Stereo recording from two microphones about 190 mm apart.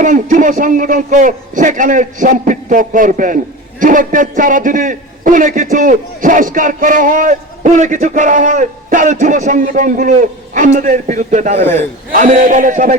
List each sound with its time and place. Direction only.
0.0 s a man's voice: 40° right (ahead or behind)